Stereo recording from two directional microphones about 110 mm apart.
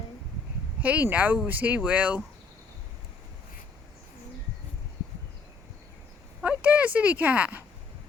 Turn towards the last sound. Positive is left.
turn(degrees=-15)  # may be behind; listen again after turning